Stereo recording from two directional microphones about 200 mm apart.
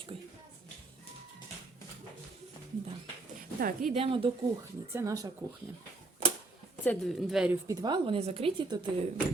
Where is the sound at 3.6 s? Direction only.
45° right (ahead or behind).